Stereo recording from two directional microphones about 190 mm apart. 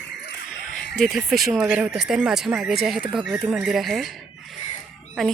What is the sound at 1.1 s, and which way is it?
Speech, centre (ahead or behind).